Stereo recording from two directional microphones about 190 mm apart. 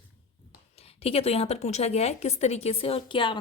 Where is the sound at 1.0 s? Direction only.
30° left (ahead or behind).